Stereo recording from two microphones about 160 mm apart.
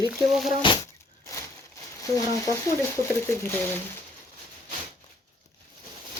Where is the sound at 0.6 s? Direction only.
30° left (ahead or behind).